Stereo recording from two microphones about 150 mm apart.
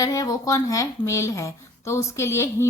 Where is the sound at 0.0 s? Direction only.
25° left (ahead or behind).